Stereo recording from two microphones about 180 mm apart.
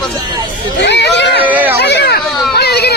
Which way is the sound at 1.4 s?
10° right (ahead or behind).